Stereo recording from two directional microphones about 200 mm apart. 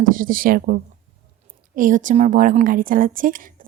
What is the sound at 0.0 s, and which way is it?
A woman's voice, 45° right (ahead or behind).